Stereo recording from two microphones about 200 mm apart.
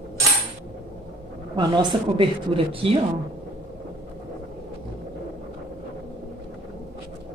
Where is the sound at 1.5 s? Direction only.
20° right (ahead or behind).